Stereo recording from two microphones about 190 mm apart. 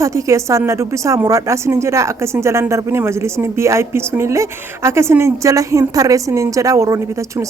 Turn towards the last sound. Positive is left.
turn(degrees=-15)  # may be behind; listen again after turning